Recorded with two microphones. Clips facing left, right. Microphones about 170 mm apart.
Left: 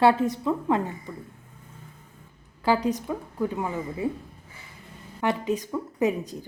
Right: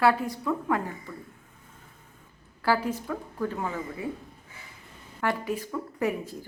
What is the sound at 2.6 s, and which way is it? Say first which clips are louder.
A woman's voice: left 3 dB; 20° left (ahead or behind).